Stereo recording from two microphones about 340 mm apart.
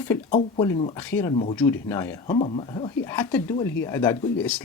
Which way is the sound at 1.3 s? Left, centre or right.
Centre.